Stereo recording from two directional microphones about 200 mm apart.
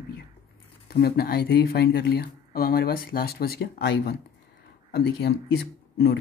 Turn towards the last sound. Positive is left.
turn(degrees=60)  # may be behind; listen again after turning